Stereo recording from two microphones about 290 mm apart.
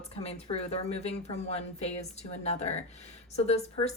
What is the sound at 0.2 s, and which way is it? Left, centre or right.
Speech, left.